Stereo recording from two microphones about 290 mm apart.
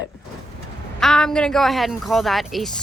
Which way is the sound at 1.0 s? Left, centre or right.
Centre.